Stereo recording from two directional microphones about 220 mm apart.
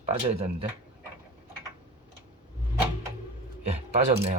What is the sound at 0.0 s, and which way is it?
Speech, 25° right (ahead or behind).